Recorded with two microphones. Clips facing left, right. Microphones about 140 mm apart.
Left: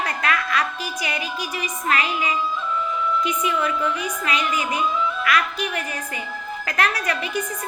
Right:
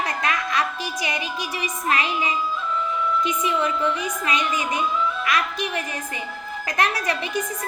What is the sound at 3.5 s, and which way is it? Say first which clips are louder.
Speech: right 1 dB; 25° right (ahead or behind).